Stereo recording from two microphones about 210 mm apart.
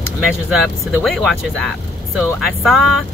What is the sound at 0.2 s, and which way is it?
Speech, centre (ahead or behind).